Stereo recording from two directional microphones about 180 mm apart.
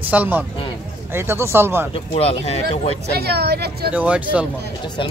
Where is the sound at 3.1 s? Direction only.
60° right (ahead or behind).